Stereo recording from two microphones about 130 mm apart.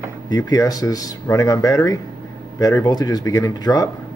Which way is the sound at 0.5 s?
25° left (ahead or behind).